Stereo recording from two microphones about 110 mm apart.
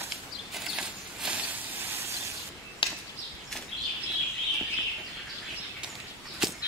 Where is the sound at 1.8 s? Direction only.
25° right (ahead or behind).